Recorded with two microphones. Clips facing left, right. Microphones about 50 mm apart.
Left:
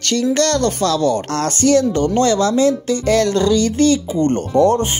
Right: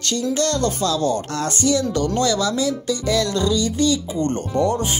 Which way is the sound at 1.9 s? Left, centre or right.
Left.